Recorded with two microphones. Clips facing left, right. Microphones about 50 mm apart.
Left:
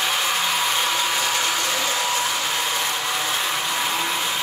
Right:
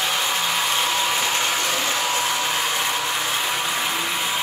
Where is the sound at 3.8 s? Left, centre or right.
Centre.